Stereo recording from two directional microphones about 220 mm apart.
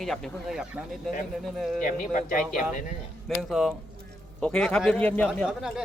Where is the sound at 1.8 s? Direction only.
40° left (ahead or behind).